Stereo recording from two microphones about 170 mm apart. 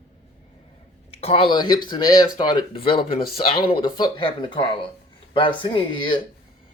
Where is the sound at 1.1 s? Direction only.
35° left (ahead or behind).